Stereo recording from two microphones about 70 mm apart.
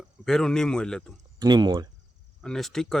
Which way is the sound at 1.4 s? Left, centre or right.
Right.